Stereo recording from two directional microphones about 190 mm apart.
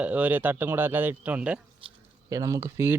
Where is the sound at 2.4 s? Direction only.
15° right (ahead or behind).